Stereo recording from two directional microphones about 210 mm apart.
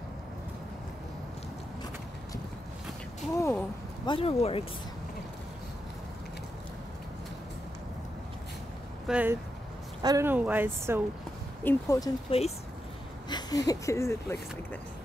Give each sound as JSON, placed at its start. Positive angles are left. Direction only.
{"t": 3.3, "sound": "a sound", "side_deg": 15}
{"t": 9.0, "sound": "speech", "side_deg": -5}
{"t": 11.6, "sound": "speech", "side_deg": 15}
{"t": 12.3, "sound": "speech", "side_deg": 30}
{"t": 13.3, "sound": "speech", "side_deg": 15}